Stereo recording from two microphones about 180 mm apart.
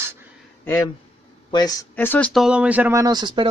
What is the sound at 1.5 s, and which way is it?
Speech, 20° left (ahead or behind).